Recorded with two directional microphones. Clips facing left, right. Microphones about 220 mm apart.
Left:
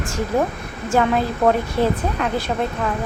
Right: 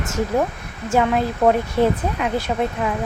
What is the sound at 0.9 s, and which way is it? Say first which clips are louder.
Speech: even; 5° right (ahead or behind).